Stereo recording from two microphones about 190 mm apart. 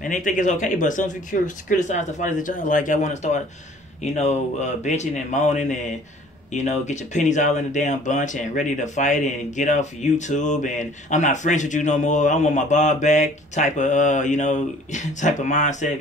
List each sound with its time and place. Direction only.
0.0 s speech: 40° left (ahead or behind)